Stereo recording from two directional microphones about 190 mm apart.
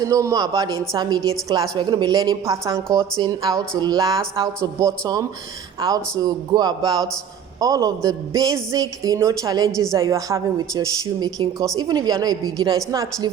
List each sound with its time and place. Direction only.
0.0 s speech: 15° right (ahead or behind)